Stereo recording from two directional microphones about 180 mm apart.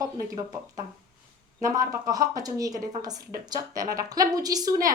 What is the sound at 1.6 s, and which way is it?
A woman's voice, 20° right (ahead or behind).